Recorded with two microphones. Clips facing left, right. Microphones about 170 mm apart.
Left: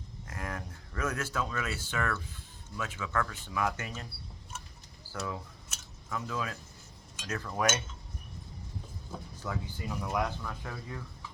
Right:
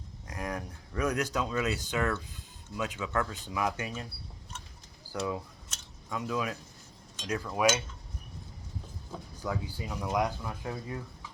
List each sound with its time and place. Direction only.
0.3 s speech: 15° right (ahead or behind)
5.1 s speech: 15° right (ahead or behind)
9.4 s speech: 10° right (ahead or behind)